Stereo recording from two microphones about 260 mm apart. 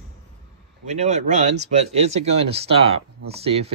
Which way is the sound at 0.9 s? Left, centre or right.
Right.